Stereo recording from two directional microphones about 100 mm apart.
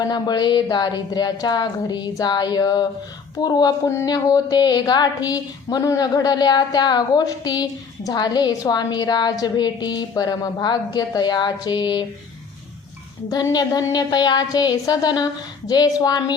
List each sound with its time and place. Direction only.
0.0 s a woman's voice: 45° left (ahead or behind)
13.3 s a woman's voice: 40° left (ahead or behind)